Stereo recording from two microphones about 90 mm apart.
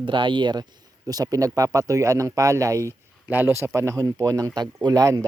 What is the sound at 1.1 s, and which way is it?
Speech, 45° right (ahead or behind).